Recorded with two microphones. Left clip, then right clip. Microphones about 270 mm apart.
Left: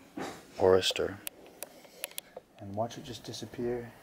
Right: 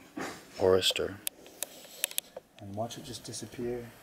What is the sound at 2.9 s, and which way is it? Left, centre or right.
Speech, centre.